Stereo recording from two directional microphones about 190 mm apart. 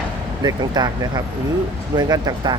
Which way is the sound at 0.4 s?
20° right (ahead or behind).